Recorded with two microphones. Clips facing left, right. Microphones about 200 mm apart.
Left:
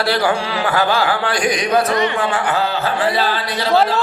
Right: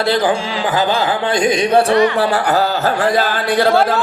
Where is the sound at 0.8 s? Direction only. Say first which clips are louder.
Right 1 dB; 20° right (ahead or behind).